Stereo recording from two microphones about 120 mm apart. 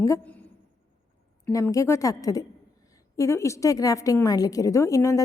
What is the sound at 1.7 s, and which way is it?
A woman's voice, 25° left (ahead or behind).